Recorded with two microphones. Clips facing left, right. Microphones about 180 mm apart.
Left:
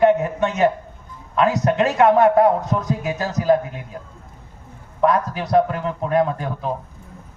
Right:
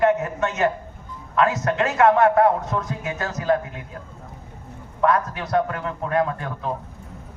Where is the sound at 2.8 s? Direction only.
35° left (ahead or behind).